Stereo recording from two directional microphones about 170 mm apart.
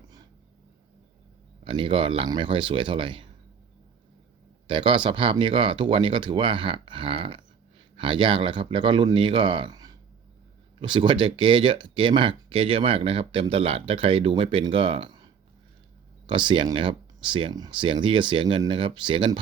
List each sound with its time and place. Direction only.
1.6 s speech: 30° right (ahead or behind)
4.6 s speech: 30° right (ahead or behind)